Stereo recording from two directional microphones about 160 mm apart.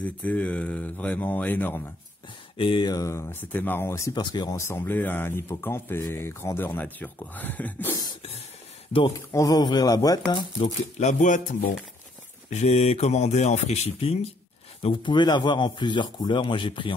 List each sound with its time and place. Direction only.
0.0 s speech: 10° left (ahead or behind)
2.5 s a man's voice: 35° left (ahead or behind); by 8.0 s 10° left (ahead or behind)
9.3 s a man's voice: 20° left (ahead or behind)
11.0 s speech: 50° left (ahead or behind)
12.4 s a man's voice: 45° left (ahead or behind)